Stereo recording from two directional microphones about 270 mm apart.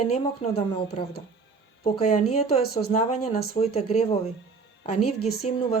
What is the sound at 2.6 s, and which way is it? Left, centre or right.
Speech, left.